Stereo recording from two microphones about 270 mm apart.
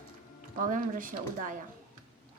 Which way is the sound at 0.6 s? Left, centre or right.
Right.